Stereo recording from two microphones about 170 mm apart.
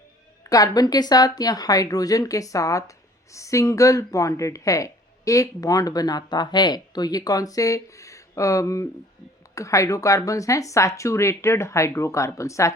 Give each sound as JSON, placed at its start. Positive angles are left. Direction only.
{"t": 0.5, "sound": "a woman's voice", "side_deg": 20}